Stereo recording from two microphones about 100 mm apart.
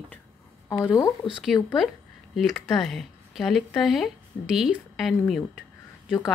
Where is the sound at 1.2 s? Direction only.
5° right (ahead or behind).